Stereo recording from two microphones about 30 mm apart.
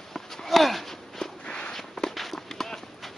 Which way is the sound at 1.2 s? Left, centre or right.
Left.